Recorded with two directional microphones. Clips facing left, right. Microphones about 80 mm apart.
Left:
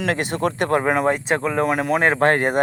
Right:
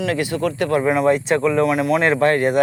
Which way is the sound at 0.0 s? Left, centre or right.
Left.